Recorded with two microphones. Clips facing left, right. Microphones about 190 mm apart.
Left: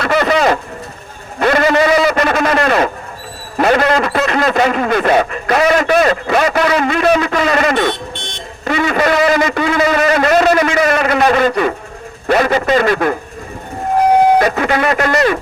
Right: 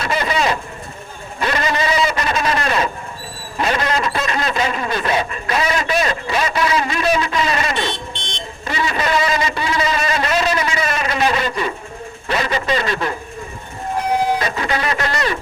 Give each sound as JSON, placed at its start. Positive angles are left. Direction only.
{"t": 0.0, "sound": "a sound", "side_deg": 55}
{"t": 8.6, "sound": "a man's voice", "side_deg": 55}
{"t": 14.3, "sound": "speech", "side_deg": 55}